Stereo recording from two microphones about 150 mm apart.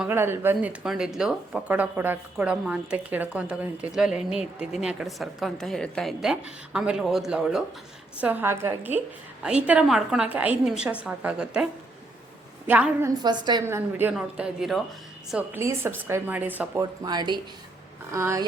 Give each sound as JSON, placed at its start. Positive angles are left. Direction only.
{"t": 0.1, "sound": "a woman's voice", "side_deg": -15}
{"t": 12.6, "sound": "speech", "side_deg": -10}
{"t": 13.2, "sound": "speech", "side_deg": -30}
{"t": 13.7, "sound": "speech", "side_deg": -15}
{"t": 15.5, "sound": "speech", "side_deg": -15}
{"t": 16.8, "sound": "speech", "side_deg": -25}